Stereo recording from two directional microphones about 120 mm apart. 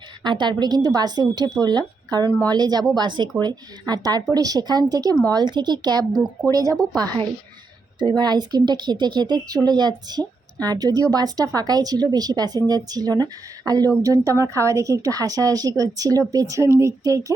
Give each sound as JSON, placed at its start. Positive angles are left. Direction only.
{"t": 0.2, "sound": "speech", "side_deg": -40}
{"t": 2.2, "sound": "speech", "side_deg": 20}
{"t": 2.5, "sound": "a woman's voice", "side_deg": -35}
{"t": 7.9, "sound": "a woman's voice", "side_deg": -35}